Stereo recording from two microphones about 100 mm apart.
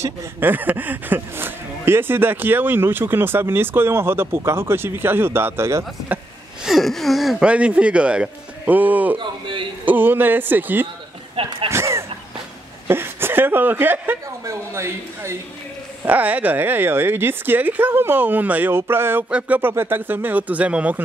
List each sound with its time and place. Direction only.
0.0 s speech: 20° right (ahead or behind)
6.6 s speech: centre (ahead or behind); by 9.2 s 15° right (ahead or behind)
9.2 s a sound: 60° right (ahead or behind)
9.8 s speech: 20° right (ahead or behind)
11.4 s speech: 75° right (ahead or behind)
11.7 s a sound: 30° right (ahead or behind)
12.8 s speech: 20° right (ahead or behind)
16.1 s speech: 15° right (ahead or behind)